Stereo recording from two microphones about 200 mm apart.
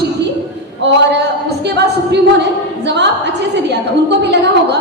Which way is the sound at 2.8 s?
60° right (ahead or behind).